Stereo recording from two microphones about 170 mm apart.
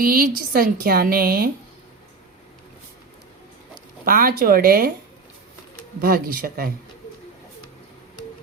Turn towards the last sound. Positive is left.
turn(degrees=-60)  # may be behind; listen again after turning